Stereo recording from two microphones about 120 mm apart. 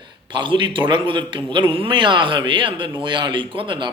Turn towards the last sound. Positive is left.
turn(degrees=-45)  # may be behind; listen again after turning